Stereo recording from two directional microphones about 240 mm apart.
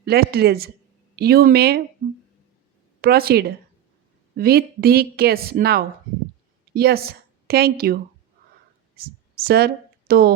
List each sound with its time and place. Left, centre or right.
0.0 s a woman's voice: right
3.0 s a woman's voice: right